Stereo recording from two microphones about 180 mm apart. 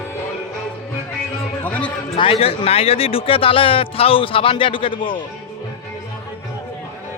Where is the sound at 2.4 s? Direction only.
30° left (ahead or behind).